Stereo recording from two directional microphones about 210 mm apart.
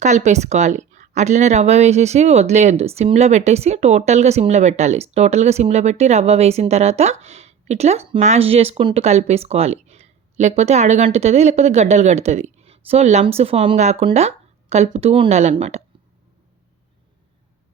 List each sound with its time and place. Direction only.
0.0 s speech: 35° right (ahead or behind)